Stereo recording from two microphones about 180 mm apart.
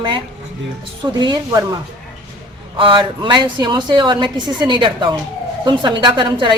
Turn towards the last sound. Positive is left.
turn(degrees=-25)  # may be behind; listen again after turning